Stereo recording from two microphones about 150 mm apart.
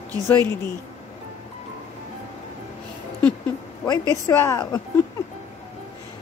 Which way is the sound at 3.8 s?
20° left (ahead or behind).